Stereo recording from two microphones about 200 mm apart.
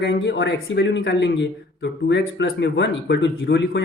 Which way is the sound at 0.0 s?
55° left (ahead or behind).